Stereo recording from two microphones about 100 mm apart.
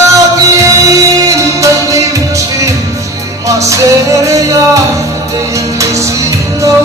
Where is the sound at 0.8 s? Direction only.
35° right (ahead or behind).